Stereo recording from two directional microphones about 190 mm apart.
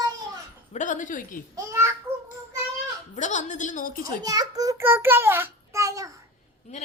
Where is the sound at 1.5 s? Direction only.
15° right (ahead or behind).